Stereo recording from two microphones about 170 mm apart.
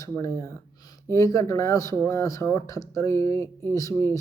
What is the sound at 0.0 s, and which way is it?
Speech, 20° left (ahead or behind).